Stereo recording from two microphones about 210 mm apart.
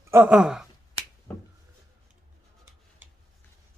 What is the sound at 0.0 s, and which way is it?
Speech, 10° right (ahead or behind).